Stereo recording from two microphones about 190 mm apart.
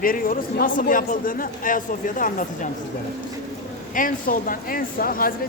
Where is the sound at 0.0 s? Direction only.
50° left (ahead or behind).